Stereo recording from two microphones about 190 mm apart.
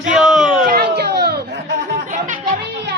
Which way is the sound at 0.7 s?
55° right (ahead or behind).